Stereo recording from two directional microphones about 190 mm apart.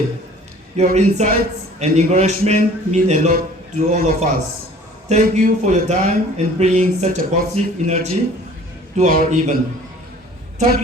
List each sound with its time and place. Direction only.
0.8 s speech: 40° right (ahead or behind)